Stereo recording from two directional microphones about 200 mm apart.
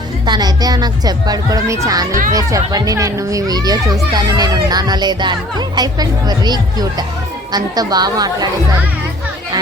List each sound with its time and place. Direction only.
0.3 s a child's voice: 20° right (ahead or behind)